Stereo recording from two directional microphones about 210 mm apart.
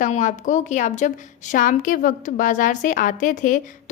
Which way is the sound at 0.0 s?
35° left (ahead or behind).